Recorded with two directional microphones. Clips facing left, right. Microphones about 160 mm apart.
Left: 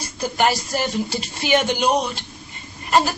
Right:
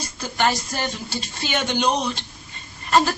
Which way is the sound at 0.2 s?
15° left (ahead or behind).